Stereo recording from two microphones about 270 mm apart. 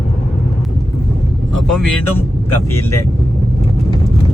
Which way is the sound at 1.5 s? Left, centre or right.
Centre.